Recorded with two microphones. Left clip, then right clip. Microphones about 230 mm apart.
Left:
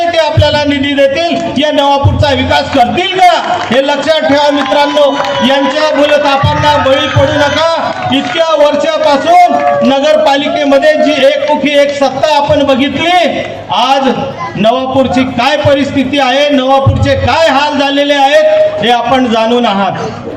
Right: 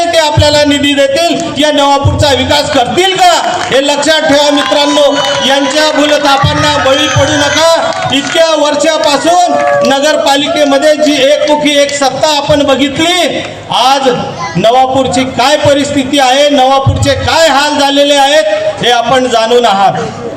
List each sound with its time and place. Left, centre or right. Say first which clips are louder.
0.2 s music: right 4 dB; right
3.0 s a man's voice: right 3 dB; right